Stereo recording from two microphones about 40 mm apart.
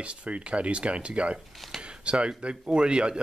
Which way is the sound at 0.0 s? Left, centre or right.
Right.